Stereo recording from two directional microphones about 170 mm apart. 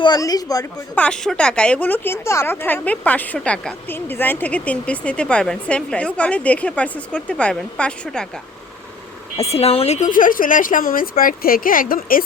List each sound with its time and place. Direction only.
0.0 s a woman's voice: 25° left (ahead or behind)
0.9 s speech: 5° left (ahead or behind)
9.4 s speech: 35° left (ahead or behind); by 12.2 s 55° left (ahead or behind)